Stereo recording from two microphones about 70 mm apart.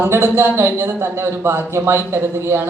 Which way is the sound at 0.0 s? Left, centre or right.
Right.